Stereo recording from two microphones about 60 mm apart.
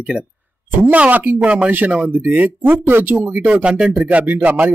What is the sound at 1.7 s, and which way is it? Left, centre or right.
Speech, right.